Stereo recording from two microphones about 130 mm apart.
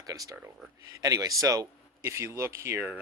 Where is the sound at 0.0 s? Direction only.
30° right (ahead or behind).